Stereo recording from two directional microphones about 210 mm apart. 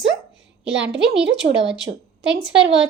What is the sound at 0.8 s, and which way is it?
Speech, 55° right (ahead or behind).